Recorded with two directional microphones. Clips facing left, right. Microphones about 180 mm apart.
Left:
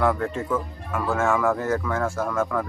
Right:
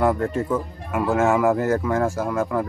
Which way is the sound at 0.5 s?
20° right (ahead or behind).